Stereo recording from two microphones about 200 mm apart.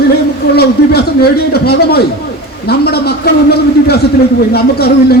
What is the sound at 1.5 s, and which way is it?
A man's voice, 50° left (ahead or behind).